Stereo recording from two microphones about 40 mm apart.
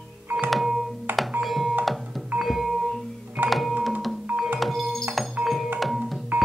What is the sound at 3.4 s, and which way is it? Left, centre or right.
Music, right.